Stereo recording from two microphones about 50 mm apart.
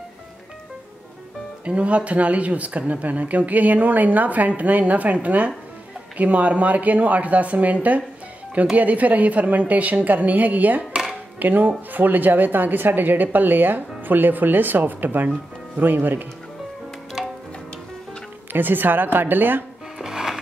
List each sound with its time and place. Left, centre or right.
1.6 s speech: right
10.8 s music: centre
11.3 s speech: right
18.5 s speech: right
20.0 s music: centre